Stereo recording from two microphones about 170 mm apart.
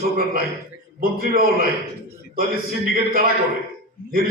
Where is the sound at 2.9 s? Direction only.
60° right (ahead or behind).